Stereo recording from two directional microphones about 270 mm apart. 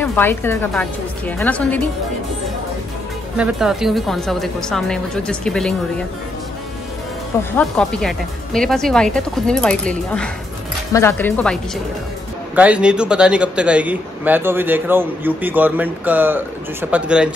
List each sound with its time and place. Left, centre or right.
0.0 s a woman's voice: centre
3.3 s a woman's voice: centre
7.5 s a woman's voice: centre
10.9 s a man's voice: centre